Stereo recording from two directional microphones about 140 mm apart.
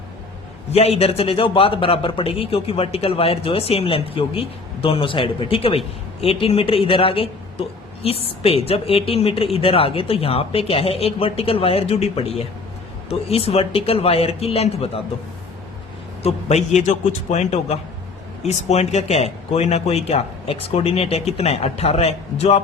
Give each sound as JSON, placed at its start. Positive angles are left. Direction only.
{"t": 0.7, "sound": "a man's voice", "side_deg": 45}
{"t": 16.2, "sound": "a woman's voice", "side_deg": 50}